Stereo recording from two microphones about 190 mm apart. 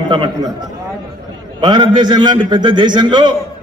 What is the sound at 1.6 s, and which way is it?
A man's voice, 20° right (ahead or behind).